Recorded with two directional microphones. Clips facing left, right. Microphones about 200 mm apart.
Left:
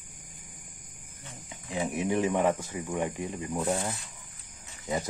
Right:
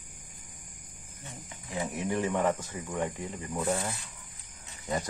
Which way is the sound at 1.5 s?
15° left (ahead or behind).